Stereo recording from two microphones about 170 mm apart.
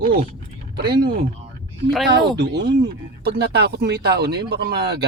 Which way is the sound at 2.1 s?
70° right (ahead or behind).